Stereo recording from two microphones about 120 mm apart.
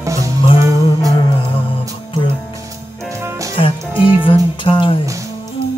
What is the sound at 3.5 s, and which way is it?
Music, 45° left (ahead or behind).